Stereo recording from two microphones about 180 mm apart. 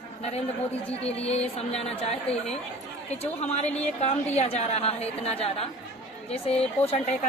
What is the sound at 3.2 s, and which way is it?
A woman's voice, 35° left (ahead or behind).